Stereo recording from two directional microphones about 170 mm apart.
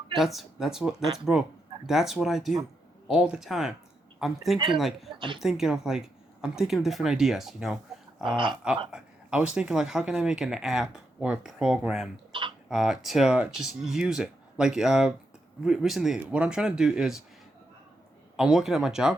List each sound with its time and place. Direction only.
0.2 s speech: centre (ahead or behind)
12.3 s speech: 30° right (ahead or behind)
12.6 s speech: centre (ahead or behind)
18.3 s speech: centre (ahead or behind)